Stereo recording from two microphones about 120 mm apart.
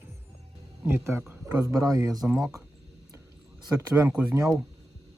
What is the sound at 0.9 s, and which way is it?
Speech, 20° right (ahead or behind).